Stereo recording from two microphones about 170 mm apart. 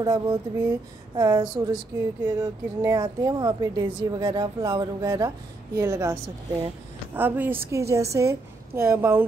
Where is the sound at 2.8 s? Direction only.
20° right (ahead or behind).